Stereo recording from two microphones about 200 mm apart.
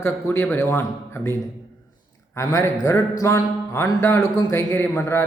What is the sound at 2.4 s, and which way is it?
Speech, 15° left (ahead or behind).